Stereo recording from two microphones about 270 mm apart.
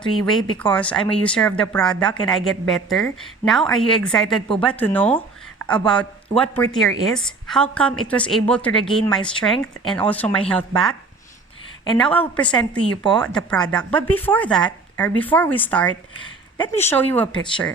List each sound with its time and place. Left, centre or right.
0.3 s speech: centre
11.9 s speech: centre